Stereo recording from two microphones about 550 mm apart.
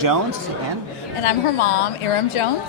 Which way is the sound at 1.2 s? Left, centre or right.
Left.